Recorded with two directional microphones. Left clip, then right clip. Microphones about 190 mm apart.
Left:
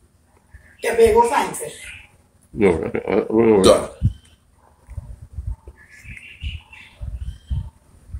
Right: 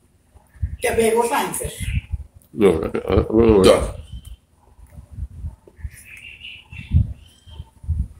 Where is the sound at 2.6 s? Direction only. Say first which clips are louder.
Right 1 dB; 20° right (ahead or behind).